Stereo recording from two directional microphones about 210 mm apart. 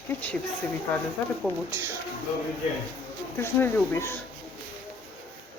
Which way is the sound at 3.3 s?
10° left (ahead or behind).